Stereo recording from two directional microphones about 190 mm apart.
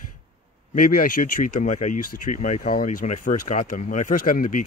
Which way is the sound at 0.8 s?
45° left (ahead or behind).